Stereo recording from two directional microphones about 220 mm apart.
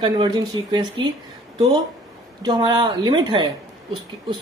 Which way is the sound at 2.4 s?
20° right (ahead or behind).